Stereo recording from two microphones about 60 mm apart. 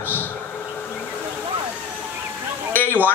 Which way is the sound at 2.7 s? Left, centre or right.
Left.